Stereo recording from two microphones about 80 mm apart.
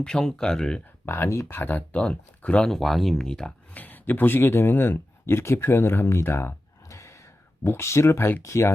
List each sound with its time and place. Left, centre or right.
0.0 s speech: centre
1.0 s speech: left; by 2.6 s centre
2.6 s speech: centre
3.8 s speech: left